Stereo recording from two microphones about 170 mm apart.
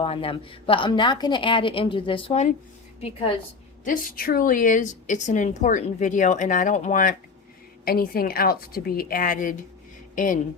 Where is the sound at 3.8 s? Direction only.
55° left (ahead or behind).